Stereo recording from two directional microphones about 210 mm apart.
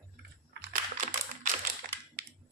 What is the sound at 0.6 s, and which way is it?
Typing, 55° right (ahead or behind).